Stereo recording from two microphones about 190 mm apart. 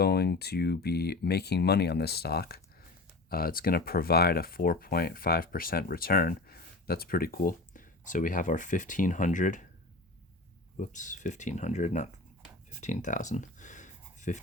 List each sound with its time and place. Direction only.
0.0 s speech: 55° left (ahead or behind)
10.8 s speech: 40° left (ahead or behind)
12.8 s a sound: 40° left (ahead or behind)